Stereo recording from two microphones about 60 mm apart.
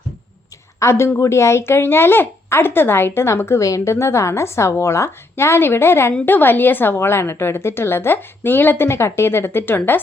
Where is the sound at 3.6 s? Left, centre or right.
Left.